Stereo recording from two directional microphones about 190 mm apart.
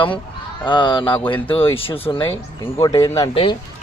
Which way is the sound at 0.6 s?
25° left (ahead or behind).